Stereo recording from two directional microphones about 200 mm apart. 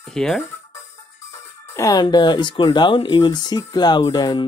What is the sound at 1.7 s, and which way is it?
Speech, 15° left (ahead or behind).